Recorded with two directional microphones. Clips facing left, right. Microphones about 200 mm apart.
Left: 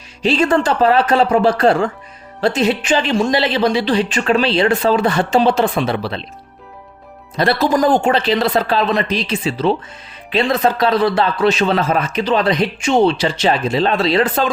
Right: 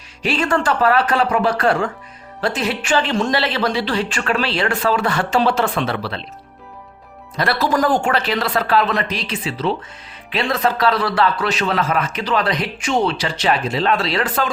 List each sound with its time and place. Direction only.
0.2 s speech: 20° left (ahead or behind)
7.3 s speech: 25° left (ahead or behind)